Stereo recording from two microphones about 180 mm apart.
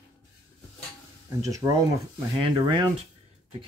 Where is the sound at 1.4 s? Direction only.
20° right (ahead or behind).